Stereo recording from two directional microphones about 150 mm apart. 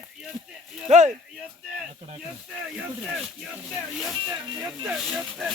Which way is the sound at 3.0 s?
5° right (ahead or behind).